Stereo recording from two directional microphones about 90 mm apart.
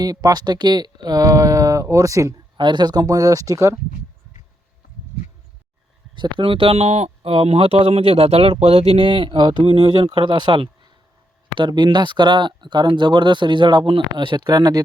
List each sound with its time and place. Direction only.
0.0 s speech: 45° right (ahead or behind)
2.6 s speech: 55° right (ahead or behind); by 3.8 s 35° right (ahead or behind)
6.1 s speech: 70° right (ahead or behind); by 14.8 s 50° right (ahead or behind)